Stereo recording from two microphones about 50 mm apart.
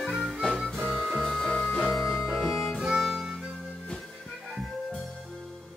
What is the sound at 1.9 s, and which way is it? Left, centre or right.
Music, centre.